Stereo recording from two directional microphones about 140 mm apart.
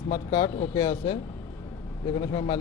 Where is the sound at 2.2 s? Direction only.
35° left (ahead or behind).